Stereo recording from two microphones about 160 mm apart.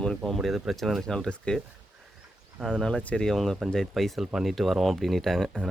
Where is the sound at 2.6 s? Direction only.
5° left (ahead or behind).